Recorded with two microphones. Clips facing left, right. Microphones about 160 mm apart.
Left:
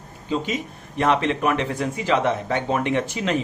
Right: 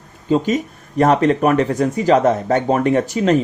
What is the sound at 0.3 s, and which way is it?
Speech, 45° right (ahead or behind).